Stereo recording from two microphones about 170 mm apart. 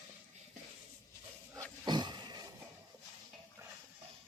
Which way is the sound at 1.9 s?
25° right (ahead or behind).